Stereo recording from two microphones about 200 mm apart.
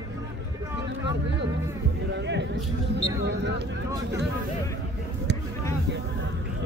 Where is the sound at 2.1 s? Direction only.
60° right (ahead or behind).